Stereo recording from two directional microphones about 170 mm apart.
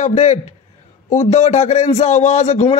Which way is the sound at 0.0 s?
40° left (ahead or behind).